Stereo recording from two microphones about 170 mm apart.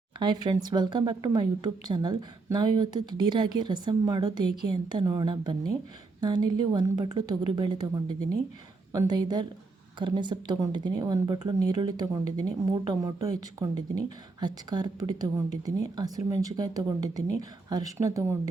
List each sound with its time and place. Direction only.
0.2 s a woman's voice: 25° right (ahead or behind)